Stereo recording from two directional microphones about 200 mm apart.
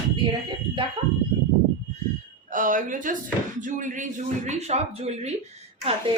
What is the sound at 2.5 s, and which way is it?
A man's voice, 40° right (ahead or behind).